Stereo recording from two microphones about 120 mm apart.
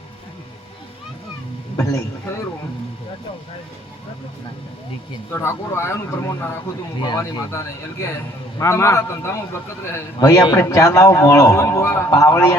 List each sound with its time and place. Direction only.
1.7 s a man's voice: 25° left (ahead or behind)
5.3 s a man's voice: 20° left (ahead or behind)